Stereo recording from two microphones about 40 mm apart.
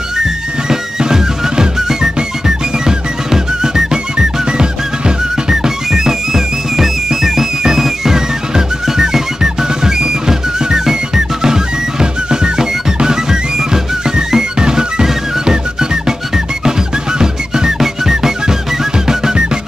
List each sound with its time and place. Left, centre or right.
0.7 s music: centre
17.2 s music: centre